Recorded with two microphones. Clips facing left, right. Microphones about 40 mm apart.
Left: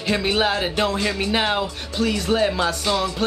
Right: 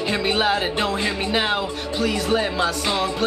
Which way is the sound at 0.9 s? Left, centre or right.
Centre.